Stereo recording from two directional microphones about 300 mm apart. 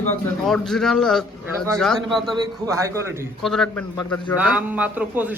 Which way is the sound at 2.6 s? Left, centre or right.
Centre.